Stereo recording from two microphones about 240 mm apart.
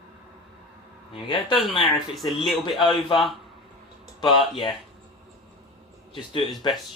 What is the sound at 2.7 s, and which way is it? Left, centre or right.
Speech, centre.